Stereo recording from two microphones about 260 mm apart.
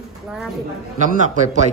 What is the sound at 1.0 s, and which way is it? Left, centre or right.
Speech, right.